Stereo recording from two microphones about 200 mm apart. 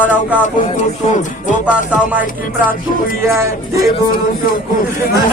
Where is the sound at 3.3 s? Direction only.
15° right (ahead or behind).